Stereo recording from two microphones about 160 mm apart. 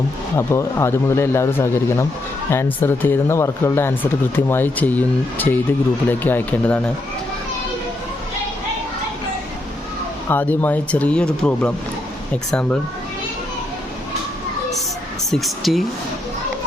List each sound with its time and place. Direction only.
0.3 s speech: 15° left (ahead or behind)
10.2 s speech: 10° left (ahead or behind)
15.3 s speech: centre (ahead or behind)